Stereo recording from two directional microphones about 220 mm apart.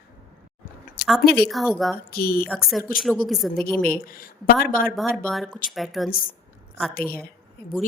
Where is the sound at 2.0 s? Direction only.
45° left (ahead or behind).